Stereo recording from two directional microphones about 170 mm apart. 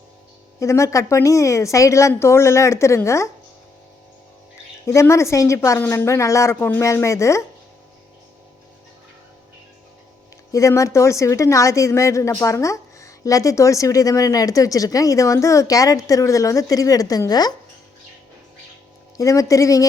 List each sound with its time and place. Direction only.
0.6 s a woman's voice: 15° left (ahead or behind)
4.9 s a woman's voice: 15° left (ahead or behind)
10.5 s speech: 20° left (ahead or behind)
19.1 s speech: 20° left (ahead or behind)